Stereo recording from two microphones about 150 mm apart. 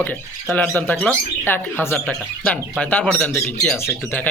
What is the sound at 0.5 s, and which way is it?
Speech, 10° left (ahead or behind).